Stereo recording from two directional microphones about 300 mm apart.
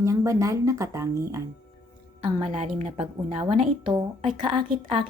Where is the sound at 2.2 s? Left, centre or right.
Right.